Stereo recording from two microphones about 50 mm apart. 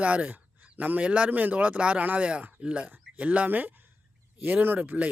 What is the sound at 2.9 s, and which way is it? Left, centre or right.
Speech, right.